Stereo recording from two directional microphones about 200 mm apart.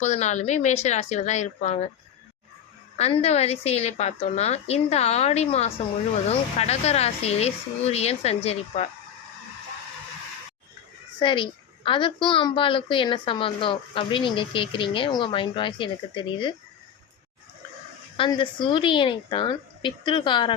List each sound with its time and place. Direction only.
0.0 s a woman's voice: 35° left (ahead or behind)
3.0 s a woman's voice: 30° left (ahead or behind)
11.2 s a woman's voice: 25° left (ahead or behind)
18.2 s a woman's voice: 25° left (ahead or behind)